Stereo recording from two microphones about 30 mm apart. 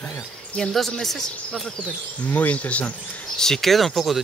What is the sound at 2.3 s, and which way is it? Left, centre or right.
Speech, left.